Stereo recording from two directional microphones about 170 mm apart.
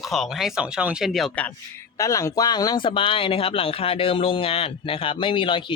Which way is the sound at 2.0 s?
20° left (ahead or behind).